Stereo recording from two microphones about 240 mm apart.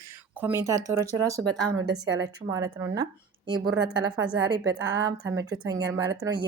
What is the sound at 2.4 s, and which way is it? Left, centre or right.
Speech, centre.